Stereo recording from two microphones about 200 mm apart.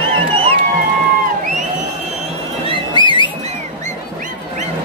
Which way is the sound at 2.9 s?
25° left (ahead or behind).